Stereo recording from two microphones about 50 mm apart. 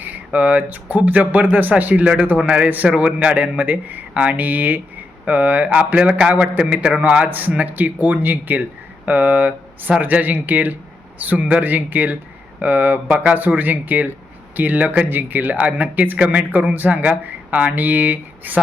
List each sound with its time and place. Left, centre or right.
0.3 s a man's voice: right
2.9 s a man's voice: right
6.0 s a man's voice: centre
7.3 s speech: right